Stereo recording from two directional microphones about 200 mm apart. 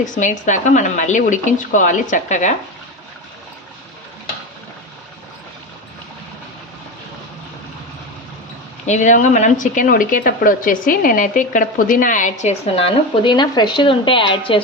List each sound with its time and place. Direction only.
0.0 s speech: 40° left (ahead or behind)
8.9 s speech: 35° left (ahead or behind)